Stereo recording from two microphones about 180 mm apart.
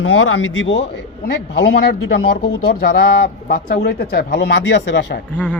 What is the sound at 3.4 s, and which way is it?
Speech, 55° left (ahead or behind).